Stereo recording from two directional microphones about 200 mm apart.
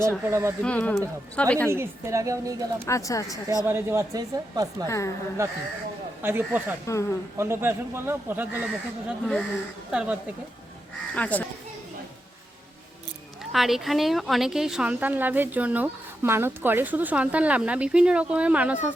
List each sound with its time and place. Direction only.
0.3 s a woman's voice: 15° right (ahead or behind)
0.6 s speech: 5° left (ahead or behind)
1.7 s a woman's voice: 15° right (ahead or behind)
2.8 s speech: 15° left (ahead or behind)
3.7 s a woman's voice: 10° right (ahead or behind)
4.9 s speech: 15° left (ahead or behind)
6.2 s a woman's voice: 10° right (ahead or behind)
6.8 s speech: 15° left (ahead or behind)
7.3 s a woman's voice: 10° right (ahead or behind)
9.0 s speech: centre (ahead or behind)
11.1 s speech: 5° left (ahead or behind)
13.5 s a woman's voice: centre (ahead or behind)